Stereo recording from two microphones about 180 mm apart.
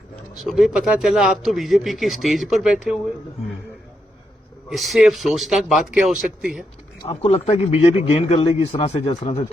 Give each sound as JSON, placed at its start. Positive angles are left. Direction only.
{"t": 0.4, "sound": "speech", "side_deg": 0}
{"t": 4.7, "sound": "speech", "side_deg": 0}
{"t": 7.0, "sound": "speech", "side_deg": 35}